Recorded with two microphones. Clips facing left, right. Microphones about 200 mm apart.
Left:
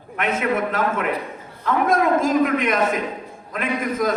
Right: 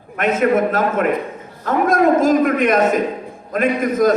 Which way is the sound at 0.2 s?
45° right (ahead or behind).